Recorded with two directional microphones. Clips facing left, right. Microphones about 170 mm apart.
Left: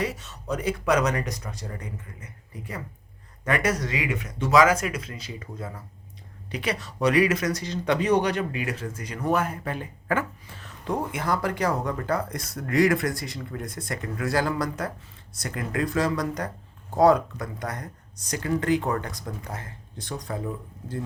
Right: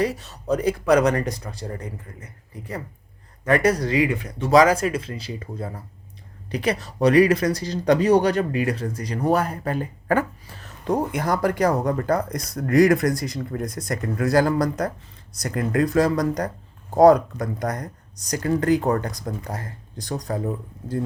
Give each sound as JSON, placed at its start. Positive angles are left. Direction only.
{"t": 0.0, "sound": "speech", "side_deg": -35}
{"t": 3.4, "sound": "speech", "side_deg": -35}